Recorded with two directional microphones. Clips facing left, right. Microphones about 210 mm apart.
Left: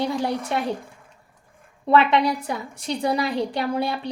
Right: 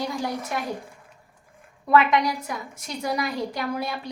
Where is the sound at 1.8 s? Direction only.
30° left (ahead or behind).